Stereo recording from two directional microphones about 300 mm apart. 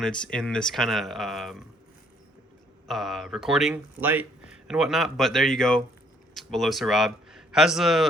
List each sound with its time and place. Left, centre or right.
0.0 s speech: centre
2.8 s speech: centre